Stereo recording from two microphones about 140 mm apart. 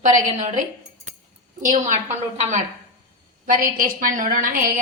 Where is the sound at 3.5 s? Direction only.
85° right.